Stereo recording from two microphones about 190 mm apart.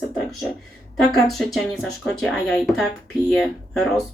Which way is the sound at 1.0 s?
Centre (ahead or behind).